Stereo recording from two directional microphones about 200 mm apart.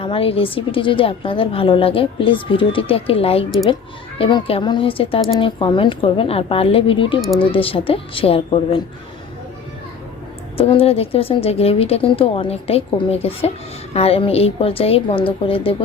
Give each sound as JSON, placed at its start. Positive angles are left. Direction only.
{"t": 0.0, "sound": "a woman's voice", "side_deg": 30}
{"t": 10.6, "sound": "a woman's voice", "side_deg": 25}